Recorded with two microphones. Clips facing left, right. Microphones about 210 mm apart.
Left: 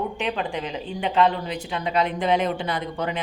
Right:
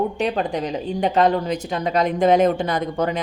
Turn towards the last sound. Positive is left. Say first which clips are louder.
# right 5 dB
turn(degrees=-40)  # may be behind; listen again after turning